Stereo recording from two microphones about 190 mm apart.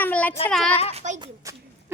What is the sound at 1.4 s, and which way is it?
Speech, 15° right (ahead or behind).